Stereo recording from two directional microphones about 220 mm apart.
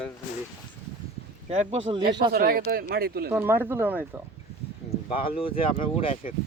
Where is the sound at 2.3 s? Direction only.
45° right (ahead or behind).